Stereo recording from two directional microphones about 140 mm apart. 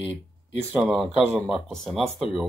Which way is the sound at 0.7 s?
10° right (ahead or behind).